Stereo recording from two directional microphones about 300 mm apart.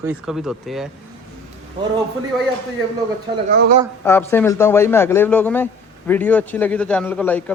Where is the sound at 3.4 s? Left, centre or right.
Right.